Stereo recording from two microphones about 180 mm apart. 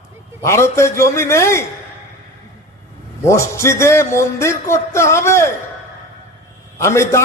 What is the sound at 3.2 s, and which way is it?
A man's voice, 15° left (ahead or behind).